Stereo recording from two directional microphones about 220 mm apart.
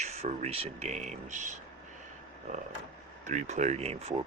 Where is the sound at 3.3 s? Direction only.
30° right (ahead or behind).